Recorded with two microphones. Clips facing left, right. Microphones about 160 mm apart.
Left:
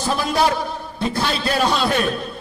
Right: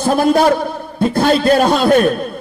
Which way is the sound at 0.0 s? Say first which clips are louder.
Right 7 dB; 50° right (ahead or behind).